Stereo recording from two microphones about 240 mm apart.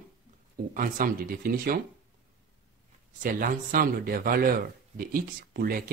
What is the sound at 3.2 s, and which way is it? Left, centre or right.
A man's voice, right.